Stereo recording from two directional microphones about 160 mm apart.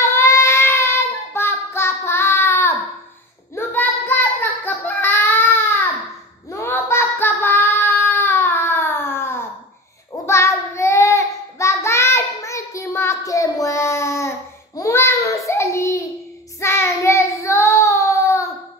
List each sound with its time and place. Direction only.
0.0 s child singing: 20° left (ahead or behind)
6.5 s child singing: 15° left (ahead or behind)
14.8 s babbling: 15° left (ahead or behind)
16.5 s child singing: 15° left (ahead or behind)